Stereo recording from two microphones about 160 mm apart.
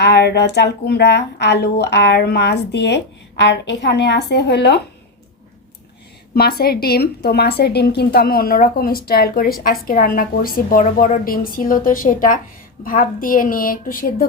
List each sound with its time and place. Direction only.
0.0 s speech: 90° left
6.3 s a woman's voice: 75° left (ahead or behind)